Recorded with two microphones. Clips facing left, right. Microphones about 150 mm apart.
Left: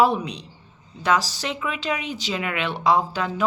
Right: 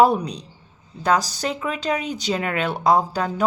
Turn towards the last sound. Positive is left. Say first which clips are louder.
# right 2 dB
turn(degrees=-40)  # may be behind; listen again after turning